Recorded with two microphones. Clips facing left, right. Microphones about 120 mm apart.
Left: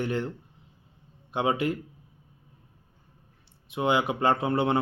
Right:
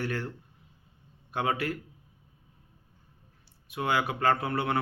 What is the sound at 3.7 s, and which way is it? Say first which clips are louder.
A man's voice: left 4 dB; 20° left (ahead or behind).